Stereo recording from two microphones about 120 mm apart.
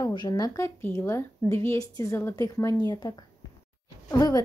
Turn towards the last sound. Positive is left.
turn(degrees=35)  # may be behind; listen again after turning